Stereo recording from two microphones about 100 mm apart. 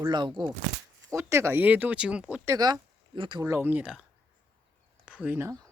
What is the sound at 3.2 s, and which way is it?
Speech, 55° right (ahead or behind).